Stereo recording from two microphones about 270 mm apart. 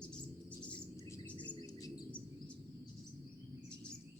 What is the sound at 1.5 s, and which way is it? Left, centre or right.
Chirp, centre.